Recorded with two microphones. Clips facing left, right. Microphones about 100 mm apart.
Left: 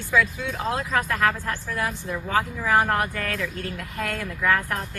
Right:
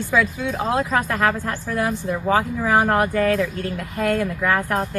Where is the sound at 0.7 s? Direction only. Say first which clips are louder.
Right 4 dB; 15° right (ahead or behind).